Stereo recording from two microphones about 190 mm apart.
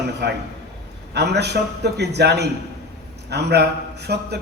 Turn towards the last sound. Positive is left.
turn(degrees=-60)  # may be behind; listen again after turning